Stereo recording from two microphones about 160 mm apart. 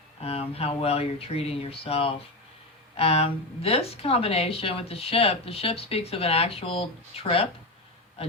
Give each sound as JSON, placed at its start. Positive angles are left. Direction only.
{"t": 0.2, "sound": "speech", "side_deg": 40}